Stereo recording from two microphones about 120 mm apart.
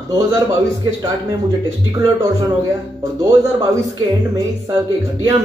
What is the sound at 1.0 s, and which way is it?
Speech, 30° right (ahead or behind).